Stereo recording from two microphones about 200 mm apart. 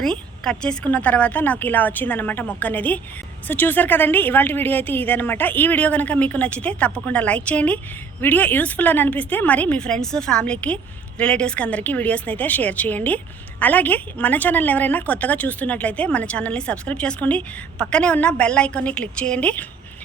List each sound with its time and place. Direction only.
0.0 s a woman's voice: 5° left (ahead or behind)